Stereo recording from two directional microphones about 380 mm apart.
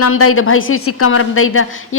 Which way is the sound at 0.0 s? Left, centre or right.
Left.